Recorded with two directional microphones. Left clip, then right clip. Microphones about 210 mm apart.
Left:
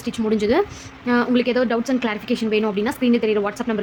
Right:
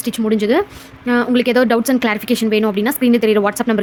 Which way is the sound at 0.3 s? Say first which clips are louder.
Right 3 dB; 20° right (ahead or behind).